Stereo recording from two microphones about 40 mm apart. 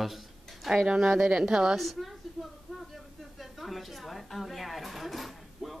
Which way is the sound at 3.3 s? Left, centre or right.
Centre.